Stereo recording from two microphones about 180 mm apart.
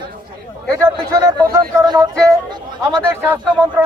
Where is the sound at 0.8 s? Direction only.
15° right (ahead or behind).